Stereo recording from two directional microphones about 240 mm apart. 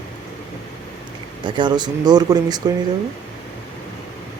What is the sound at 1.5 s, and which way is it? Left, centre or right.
Speech, centre.